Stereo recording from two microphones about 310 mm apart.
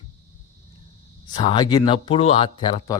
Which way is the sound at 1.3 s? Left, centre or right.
Centre.